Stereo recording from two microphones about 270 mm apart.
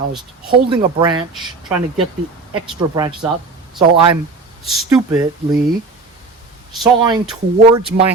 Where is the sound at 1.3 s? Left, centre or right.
Centre.